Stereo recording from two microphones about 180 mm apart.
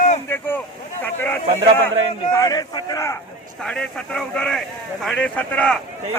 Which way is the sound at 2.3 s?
20° left (ahead or behind).